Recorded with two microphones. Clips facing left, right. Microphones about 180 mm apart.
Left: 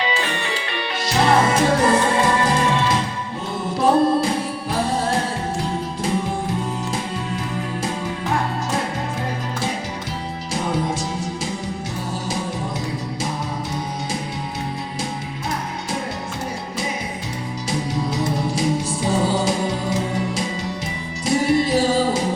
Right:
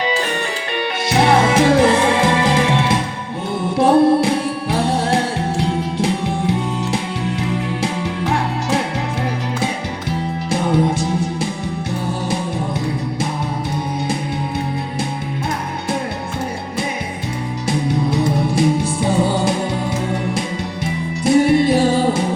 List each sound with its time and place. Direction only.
0.0 s music: 45° right (ahead or behind)
1.0 s music: 65° right (ahead or behind); by 8.8 s 80° right
11.0 s music: 60° right (ahead or behind)
17.7 s music: 60° right (ahead or behind)
21.2 s music: 60° right (ahead or behind)